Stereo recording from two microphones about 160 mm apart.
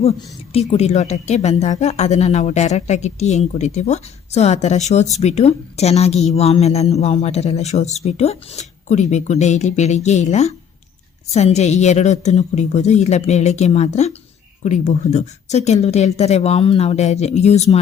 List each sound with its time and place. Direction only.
0.0 s a woman's voice: 40° left (ahead or behind)